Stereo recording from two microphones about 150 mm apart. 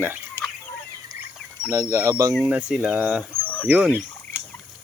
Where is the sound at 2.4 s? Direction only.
10° right (ahead or behind).